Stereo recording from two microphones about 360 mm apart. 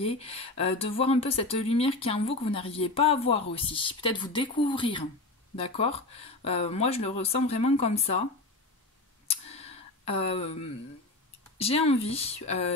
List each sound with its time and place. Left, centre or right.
0.0 s speech: centre
9.3 s a sound: centre
11.5 s speech: centre